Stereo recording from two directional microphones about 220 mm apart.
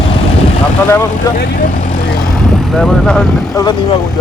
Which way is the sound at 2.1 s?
Centre (ahead or behind).